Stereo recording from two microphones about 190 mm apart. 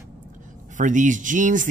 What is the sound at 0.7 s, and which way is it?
Speech, 40° right (ahead or behind).